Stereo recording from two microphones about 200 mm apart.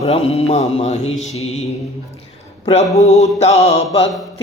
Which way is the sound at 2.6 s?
30° left (ahead or behind).